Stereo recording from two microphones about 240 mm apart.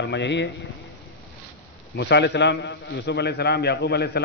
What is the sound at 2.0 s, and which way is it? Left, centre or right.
A man's voice, left.